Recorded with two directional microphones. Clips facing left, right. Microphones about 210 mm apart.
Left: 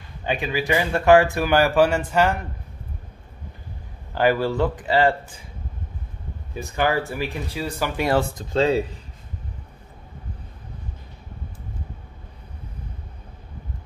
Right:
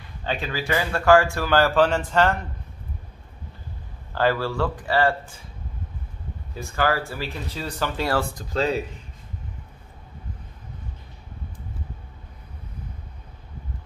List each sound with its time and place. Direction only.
0.2 s speech: 15° left (ahead or behind)
4.1 s speech: 15° left (ahead or behind)
6.5 s speech: 20° left (ahead or behind)